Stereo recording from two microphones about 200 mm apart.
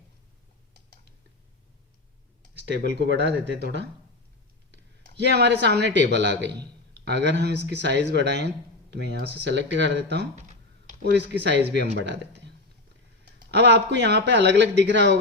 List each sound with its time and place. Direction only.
2.8 s speech: 60° right (ahead or behind)
5.2 s speech: 55° right (ahead or behind)
13.5 s speech: 60° right (ahead or behind)